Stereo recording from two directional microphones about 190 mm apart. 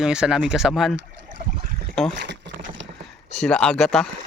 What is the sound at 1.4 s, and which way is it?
Trickle, 55° right (ahead or behind).